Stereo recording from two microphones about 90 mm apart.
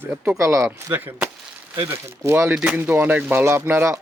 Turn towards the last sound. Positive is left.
turn(degrees=-25)  # may be behind; listen again after turning